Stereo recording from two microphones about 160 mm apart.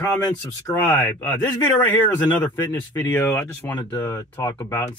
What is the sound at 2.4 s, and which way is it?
Speech, 15° left (ahead or behind).